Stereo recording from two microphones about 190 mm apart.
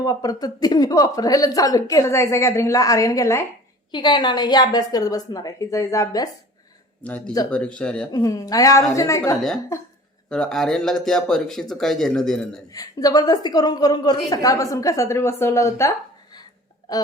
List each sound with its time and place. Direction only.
0.0 s a woman's voice: 20° left (ahead or behind)
7.0 s speech: 5° left (ahead or behind)
8.1 s a woman's voice: 20° left (ahead or behind)
10.2 s speech: 5° left (ahead or behind)
12.7 s a woman's voice: 20° left (ahead or behind)